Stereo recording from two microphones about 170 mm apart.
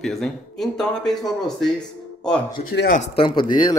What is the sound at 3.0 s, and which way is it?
Speech, 30° left (ahead or behind).